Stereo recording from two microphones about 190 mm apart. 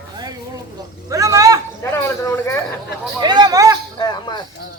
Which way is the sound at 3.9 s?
20° left (ahead or behind).